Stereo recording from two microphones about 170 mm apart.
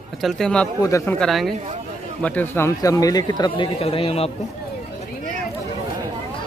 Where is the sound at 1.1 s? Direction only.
Centre (ahead or behind); by 4.3 s 35° left (ahead or behind).